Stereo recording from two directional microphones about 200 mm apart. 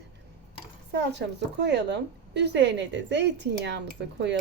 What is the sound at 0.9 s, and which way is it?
A woman's voice, 60° right (ahead or behind).